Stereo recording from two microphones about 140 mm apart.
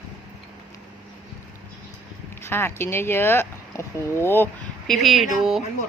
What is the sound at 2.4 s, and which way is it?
Speech, 15° left (ahead or behind).